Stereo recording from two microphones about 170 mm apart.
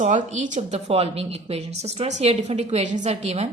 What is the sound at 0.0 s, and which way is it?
A woman's voice, 45° right (ahead or behind).